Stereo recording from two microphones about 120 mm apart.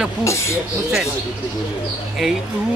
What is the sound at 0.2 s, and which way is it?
Speech, 25° left (ahead or behind).